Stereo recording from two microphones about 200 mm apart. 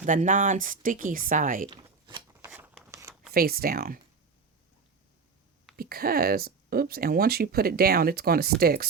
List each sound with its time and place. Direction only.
0.0 s speech: 40° right (ahead or behind)
1.7 s scissors: 20° right (ahead or behind)
2.9 s a sound: 15° right (ahead or behind)
3.3 s speech: 50° right (ahead or behind)
5.7 s speech: 50° right (ahead or behind)